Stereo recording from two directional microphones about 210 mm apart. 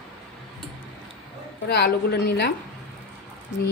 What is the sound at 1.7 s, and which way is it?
Speech, 50° left (ahead or behind).